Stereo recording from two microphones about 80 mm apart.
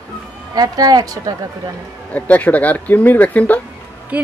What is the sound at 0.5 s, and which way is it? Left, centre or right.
Speech, right.